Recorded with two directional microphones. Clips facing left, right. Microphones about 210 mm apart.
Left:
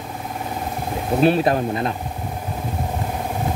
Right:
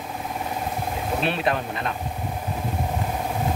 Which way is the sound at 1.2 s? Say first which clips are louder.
Left 10 dB; 40° left (ahead or behind).